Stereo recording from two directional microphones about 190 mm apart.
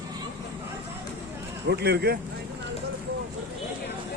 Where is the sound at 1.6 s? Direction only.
60° right (ahead or behind).